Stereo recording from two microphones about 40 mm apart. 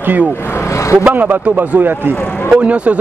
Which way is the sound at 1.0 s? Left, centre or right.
Right.